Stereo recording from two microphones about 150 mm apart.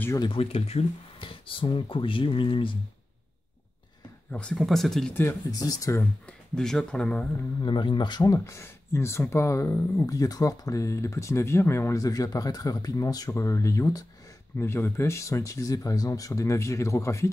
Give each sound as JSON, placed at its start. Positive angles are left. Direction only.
{"t": 0.2, "sound": "speech", "side_deg": 40}
{"t": 4.3, "sound": "speech", "side_deg": 5}
{"t": 5.1, "sound": "speech", "side_deg": 20}
{"t": 6.2, "sound": "speech", "side_deg": 5}
{"t": 7.6, "sound": "speech", "side_deg": 30}